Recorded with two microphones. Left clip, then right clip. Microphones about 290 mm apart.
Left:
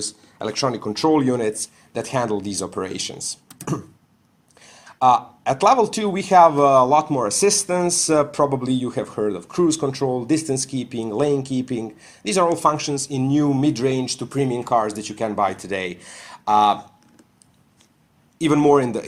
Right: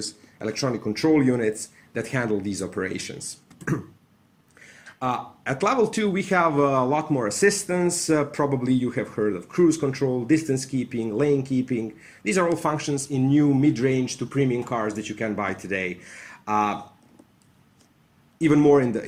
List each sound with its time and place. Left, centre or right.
0.5 s speech: centre
4.6 s a sound: centre
5.5 s speech: centre
10.7 s speech: left
18.3 s speech: centre